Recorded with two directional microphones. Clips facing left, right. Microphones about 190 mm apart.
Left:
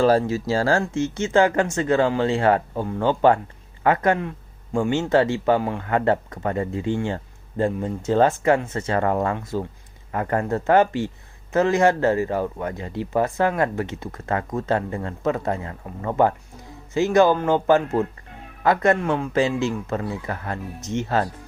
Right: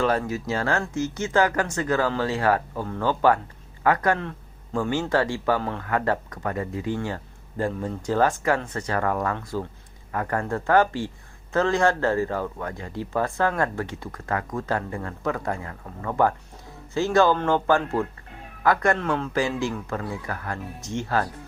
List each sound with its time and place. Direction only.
0.0 s speech: 30° left (ahead or behind)
4.2 s a sound: 10° left (ahead or behind)
4.8 s speech: 25° left (ahead or behind)